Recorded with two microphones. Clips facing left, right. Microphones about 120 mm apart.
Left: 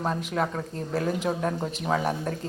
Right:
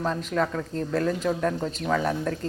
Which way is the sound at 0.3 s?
10° left (ahead or behind).